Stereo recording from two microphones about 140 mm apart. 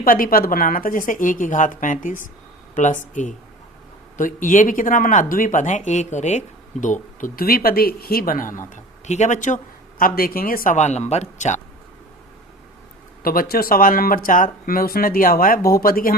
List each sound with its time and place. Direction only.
0.0 s speech: 90° left; by 9.6 s 60° left (ahead or behind)
10.0 s speech: 90° left
10.8 s speech: 55° left (ahead or behind)
13.2 s speech: 90° left